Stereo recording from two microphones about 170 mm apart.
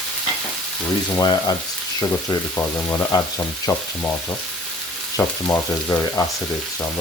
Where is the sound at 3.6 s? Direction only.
15° left (ahead or behind).